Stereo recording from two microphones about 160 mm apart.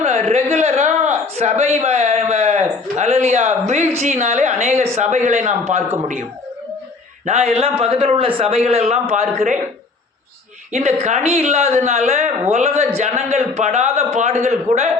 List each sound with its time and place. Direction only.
0.0 s speech: 40° right (ahead or behind)
7.3 s a man's voice: 40° right (ahead or behind)
10.7 s speech: 45° right (ahead or behind)